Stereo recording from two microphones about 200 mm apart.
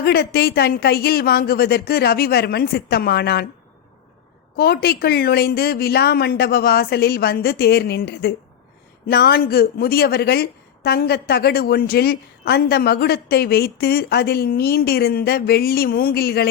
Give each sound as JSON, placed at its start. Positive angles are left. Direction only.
{"t": 0.0, "sound": "a woman's voice", "side_deg": 50}
{"t": 4.5, "sound": "a woman's voice", "side_deg": 50}